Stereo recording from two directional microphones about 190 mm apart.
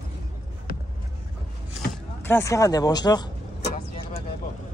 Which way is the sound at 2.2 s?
15° left (ahead or behind).